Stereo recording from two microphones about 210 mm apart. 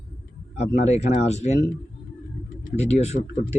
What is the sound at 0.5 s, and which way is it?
Speech, 30° left (ahead or behind).